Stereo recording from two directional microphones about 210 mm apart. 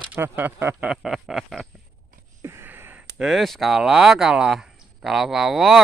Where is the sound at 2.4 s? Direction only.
10° right (ahead or behind).